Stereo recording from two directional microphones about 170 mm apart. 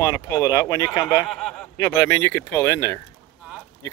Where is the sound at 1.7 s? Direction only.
15° left (ahead or behind).